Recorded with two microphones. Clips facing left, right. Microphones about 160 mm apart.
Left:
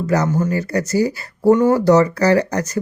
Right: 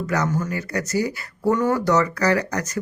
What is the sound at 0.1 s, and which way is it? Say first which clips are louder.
A man's voice: left 6 dB; 30° left (ahead or behind).